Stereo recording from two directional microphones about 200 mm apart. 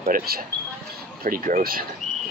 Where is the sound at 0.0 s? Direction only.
45° right (ahead or behind).